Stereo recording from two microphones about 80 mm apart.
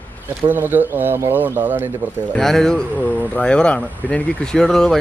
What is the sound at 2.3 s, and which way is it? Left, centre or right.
Speech, centre.